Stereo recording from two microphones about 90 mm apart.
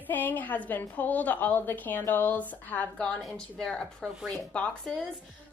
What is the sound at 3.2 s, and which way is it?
Speech, 5° left (ahead or behind).